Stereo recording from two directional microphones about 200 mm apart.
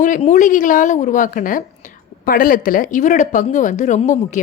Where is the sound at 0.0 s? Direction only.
40° left (ahead or behind).